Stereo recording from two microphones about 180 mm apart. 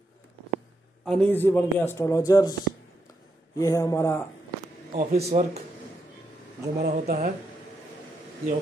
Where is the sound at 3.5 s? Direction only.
20° left (ahead or behind).